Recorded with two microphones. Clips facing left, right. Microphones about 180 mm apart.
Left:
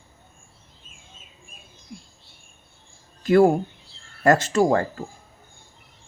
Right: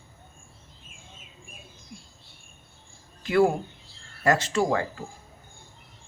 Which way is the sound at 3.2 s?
45° left (ahead or behind).